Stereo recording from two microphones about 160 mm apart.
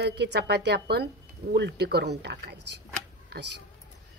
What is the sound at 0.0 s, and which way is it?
Speech, 90° right.